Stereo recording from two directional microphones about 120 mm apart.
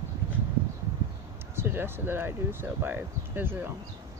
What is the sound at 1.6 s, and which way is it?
Speech, 20° right (ahead or behind).